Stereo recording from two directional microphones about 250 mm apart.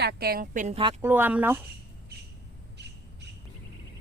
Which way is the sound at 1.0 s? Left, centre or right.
Centre.